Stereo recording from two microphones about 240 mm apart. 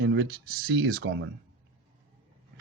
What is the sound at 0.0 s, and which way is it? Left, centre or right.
Speech, right.